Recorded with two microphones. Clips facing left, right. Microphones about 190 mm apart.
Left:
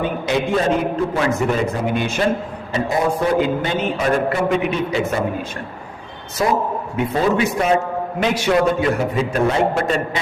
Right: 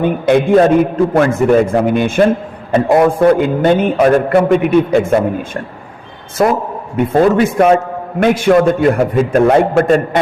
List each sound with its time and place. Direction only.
0.0 s a man's voice: 55° right (ahead or behind)